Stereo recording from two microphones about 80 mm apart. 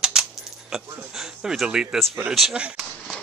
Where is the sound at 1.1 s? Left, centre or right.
Centre.